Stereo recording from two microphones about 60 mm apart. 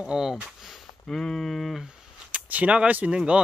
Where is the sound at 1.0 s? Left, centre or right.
Centre.